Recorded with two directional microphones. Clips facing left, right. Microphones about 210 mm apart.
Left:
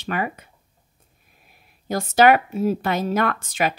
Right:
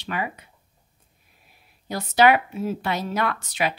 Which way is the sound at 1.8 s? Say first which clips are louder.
Left 3 dB; 45° left (ahead or behind).